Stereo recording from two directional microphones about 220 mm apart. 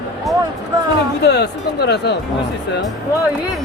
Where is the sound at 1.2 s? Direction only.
50° left (ahead or behind).